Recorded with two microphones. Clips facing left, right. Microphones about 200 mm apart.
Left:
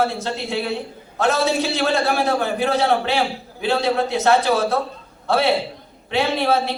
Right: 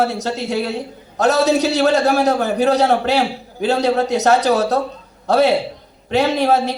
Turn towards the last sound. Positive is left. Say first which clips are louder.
# right 4 dB
turn(degrees=-40)  # may be behind; listen again after turning